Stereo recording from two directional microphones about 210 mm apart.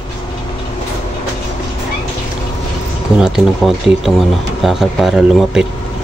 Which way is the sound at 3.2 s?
Centre (ahead or behind).